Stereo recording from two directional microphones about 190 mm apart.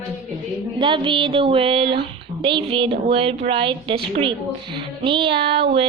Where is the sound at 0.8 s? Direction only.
25° right (ahead or behind).